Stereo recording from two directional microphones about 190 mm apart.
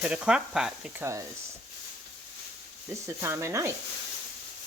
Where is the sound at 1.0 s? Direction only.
15° right (ahead or behind).